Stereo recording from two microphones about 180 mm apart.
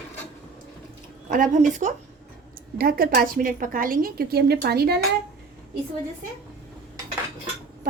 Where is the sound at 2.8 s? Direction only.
55° right (ahead or behind).